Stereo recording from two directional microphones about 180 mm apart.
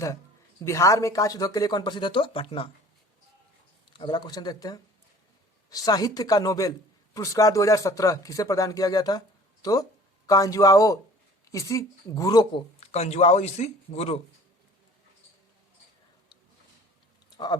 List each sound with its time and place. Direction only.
0.6 s a man's voice: 15° left (ahead or behind)
3.9 s a man's voice: 25° left (ahead or behind)
17.2 s a sound: 25° left (ahead or behind)